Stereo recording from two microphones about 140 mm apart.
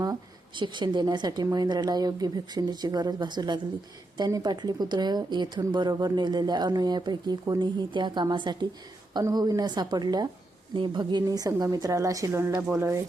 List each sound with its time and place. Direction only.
0.0 s speech: 30° right (ahead or behind)